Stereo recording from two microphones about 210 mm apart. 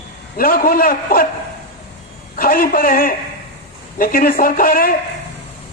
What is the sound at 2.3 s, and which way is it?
Speech, 45° left (ahead or behind).